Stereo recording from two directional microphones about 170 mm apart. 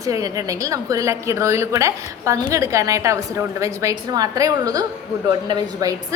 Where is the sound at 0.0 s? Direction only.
20° right (ahead or behind).